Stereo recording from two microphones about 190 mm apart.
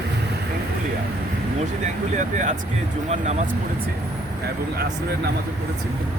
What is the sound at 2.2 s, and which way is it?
Speech, 40° right (ahead or behind).